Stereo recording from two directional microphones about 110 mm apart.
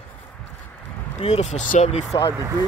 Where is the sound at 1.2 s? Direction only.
80° left.